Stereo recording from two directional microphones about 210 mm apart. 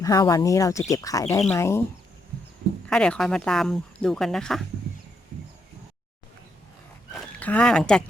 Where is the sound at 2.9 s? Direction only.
5° left (ahead or behind).